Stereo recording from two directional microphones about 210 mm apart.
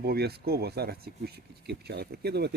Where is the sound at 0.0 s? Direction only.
50° right (ahead or behind).